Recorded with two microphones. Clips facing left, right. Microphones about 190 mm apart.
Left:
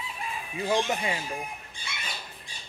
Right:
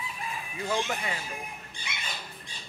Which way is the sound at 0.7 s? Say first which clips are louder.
Left 4 dB; 20° left (ahead or behind).